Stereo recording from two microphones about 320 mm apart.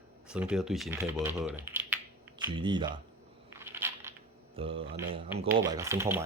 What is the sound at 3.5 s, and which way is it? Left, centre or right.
Crunch, centre.